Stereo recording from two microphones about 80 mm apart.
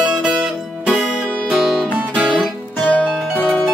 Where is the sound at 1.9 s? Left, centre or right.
Centre.